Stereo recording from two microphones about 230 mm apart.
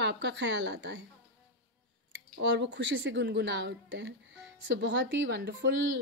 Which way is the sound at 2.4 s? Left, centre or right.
Right.